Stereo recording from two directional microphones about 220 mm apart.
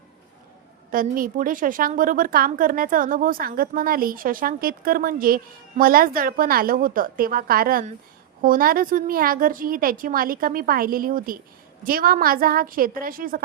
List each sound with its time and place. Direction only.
0.9 s a woman's voice: 40° right (ahead or behind)